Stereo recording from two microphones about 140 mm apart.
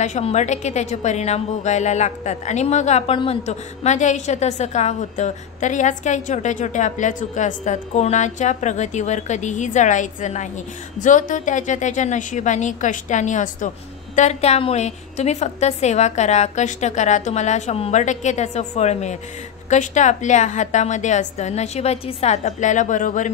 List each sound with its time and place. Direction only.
0.0 s a woman's voice: 55° left (ahead or behind)